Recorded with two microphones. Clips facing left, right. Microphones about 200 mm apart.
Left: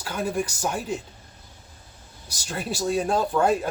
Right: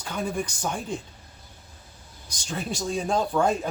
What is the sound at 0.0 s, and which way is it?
Speech, 5° left (ahead or behind).